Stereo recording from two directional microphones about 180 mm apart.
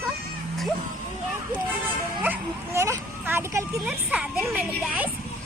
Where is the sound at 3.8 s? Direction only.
5° right (ahead or behind).